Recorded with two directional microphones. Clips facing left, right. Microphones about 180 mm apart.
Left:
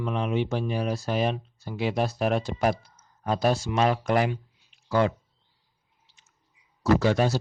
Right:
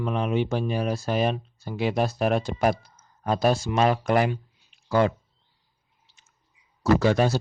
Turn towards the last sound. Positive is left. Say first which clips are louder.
# right 2 dB
turn(degrees=-50)  # may be behind; listen again after turning